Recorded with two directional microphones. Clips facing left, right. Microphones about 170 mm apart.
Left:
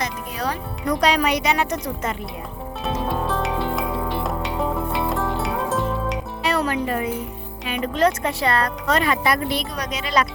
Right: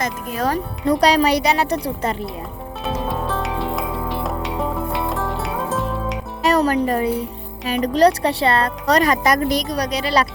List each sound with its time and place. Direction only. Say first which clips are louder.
0.0 s speech: right 4 dB; 45° right (ahead or behind)
0.9 s speech: right 4 dB; 35° right (ahead or behind)
2.8 s music: even; centre (ahead or behind)
6.4 s speech: right 6 dB; 40° right (ahead or behind)
9.0 s speech: right 4 dB; 40° right (ahead or behind)